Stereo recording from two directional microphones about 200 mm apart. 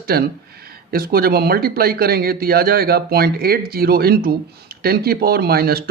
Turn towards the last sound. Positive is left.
turn(degrees=-50)  # may be behind; listen again after turning